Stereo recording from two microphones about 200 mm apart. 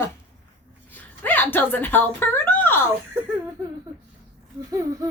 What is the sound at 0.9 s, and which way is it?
A woman's voice, 10° left (ahead or behind).